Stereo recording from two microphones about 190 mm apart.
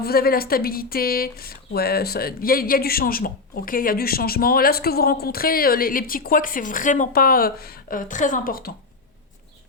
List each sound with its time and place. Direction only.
0.0 s speech: 55° left (ahead or behind)